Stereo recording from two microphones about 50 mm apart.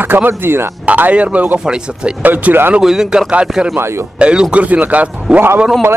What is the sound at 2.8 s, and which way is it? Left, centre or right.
Speech, centre.